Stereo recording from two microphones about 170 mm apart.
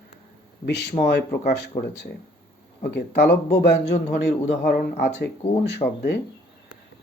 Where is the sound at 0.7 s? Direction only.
80° left.